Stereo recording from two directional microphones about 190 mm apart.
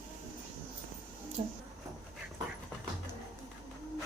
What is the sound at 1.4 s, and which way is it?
Speech, 30° right (ahead or behind).